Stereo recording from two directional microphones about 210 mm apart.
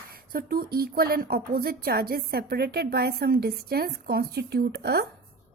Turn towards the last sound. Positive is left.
turn(degrees=-50)  # may be behind; listen again after turning